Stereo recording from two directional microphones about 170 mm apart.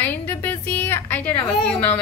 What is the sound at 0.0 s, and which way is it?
A woman's voice, 10° left (ahead or behind).